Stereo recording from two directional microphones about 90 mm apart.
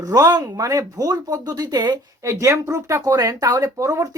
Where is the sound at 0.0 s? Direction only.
45° right (ahead or behind).